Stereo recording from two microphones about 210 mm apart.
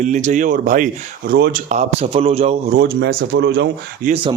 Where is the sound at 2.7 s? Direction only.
45° right (ahead or behind).